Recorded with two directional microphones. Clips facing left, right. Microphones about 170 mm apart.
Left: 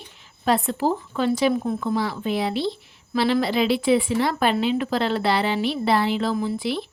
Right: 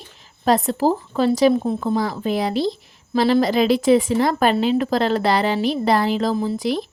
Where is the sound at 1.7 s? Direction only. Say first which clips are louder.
Right 3 dB; 40° right (ahead or behind).